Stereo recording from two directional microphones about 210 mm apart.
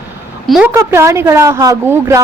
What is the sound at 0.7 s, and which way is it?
Speech, 10° right (ahead or behind).